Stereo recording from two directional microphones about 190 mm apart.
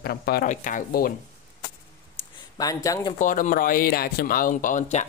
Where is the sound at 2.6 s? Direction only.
20° left (ahead or behind).